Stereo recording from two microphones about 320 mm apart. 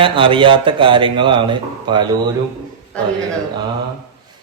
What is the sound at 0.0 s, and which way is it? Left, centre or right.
A man's voice, centre.